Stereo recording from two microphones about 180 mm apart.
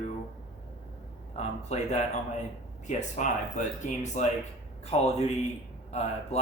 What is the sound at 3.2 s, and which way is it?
Speech, 45° left (ahead or behind).